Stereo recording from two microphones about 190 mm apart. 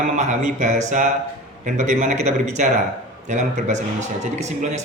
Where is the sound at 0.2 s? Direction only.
40° right (ahead or behind).